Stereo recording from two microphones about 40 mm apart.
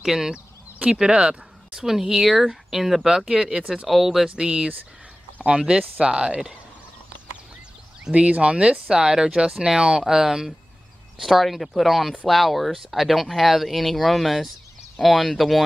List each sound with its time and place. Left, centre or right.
0.0 s speech: centre
1.0 s speech: right
1.9 s speech: centre
4.4 s speech: right
8.1 s speech: right; by 10.5 s centre
11.1 s speech: centre